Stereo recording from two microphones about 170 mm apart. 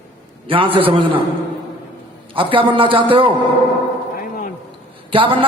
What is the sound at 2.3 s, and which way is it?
Speech, 30° right (ahead or behind).